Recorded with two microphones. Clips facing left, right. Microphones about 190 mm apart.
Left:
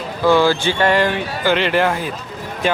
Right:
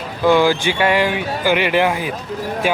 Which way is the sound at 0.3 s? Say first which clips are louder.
Even; 15° right (ahead or behind).